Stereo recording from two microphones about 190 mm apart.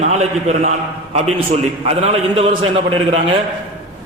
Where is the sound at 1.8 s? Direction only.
30° right (ahead or behind).